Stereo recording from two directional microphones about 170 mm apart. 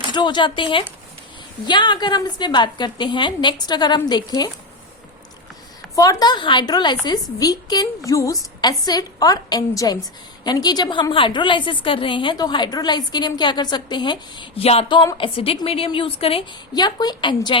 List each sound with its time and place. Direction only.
0.1 s a woman's voice: 25° left (ahead or behind)
6.0 s a woman's voice: 20° left (ahead or behind)